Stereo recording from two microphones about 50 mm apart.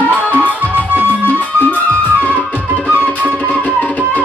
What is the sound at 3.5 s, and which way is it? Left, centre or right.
Music, left.